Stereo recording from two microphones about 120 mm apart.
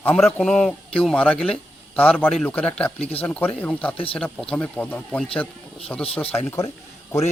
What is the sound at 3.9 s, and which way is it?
Speech, 50° left (ahead or behind).